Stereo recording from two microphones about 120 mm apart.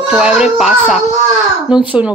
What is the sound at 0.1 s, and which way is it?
Speech, 10° right (ahead or behind).